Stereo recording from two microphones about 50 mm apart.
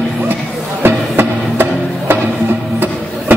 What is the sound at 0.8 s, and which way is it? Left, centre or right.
Music, right.